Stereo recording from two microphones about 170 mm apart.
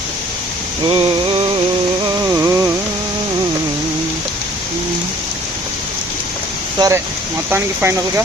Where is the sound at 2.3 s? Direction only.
15° right (ahead or behind).